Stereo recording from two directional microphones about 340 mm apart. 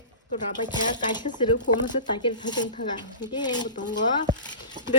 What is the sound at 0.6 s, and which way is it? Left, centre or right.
Speech, centre.